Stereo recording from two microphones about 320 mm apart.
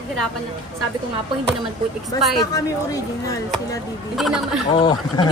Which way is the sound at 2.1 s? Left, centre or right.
Centre.